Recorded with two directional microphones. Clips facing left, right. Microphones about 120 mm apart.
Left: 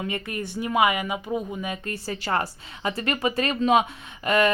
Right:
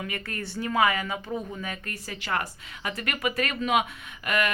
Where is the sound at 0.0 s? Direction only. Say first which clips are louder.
Left 4 dB; 20° left (ahead or behind).